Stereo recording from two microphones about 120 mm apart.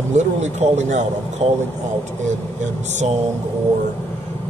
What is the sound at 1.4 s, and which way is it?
Speech, 60° right (ahead or behind).